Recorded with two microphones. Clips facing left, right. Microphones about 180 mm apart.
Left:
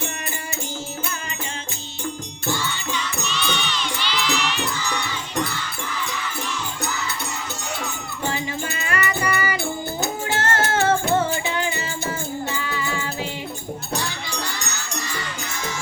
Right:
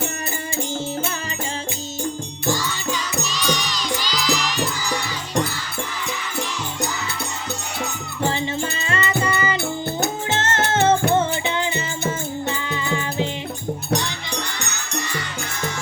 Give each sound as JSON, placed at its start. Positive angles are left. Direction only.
{"t": 2.5, "sound": "music", "side_deg": -40}
{"t": 8.9, "sound": "music", "side_deg": -25}